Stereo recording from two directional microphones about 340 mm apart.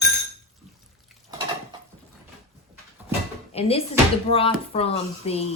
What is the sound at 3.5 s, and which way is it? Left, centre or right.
Speech, centre.